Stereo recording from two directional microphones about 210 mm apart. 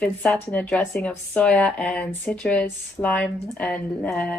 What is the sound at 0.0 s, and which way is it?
A woman's voice, 5° left (ahead or behind).